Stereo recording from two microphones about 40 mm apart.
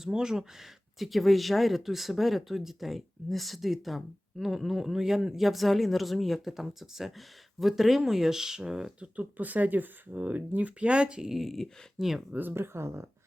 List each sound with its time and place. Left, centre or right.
0.1 s speech: centre
0.9 s speech: centre
9.0 s speech: right
11.3 s speech: centre
12.5 s speech: right